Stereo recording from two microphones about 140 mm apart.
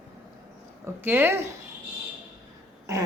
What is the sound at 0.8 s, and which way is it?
Speech, 15° right (ahead or behind).